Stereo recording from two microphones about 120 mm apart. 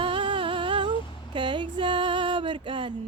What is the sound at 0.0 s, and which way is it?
Humming, 45° right (ahead or behind).